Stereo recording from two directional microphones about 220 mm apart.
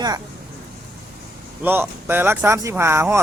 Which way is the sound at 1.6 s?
10° right (ahead or behind).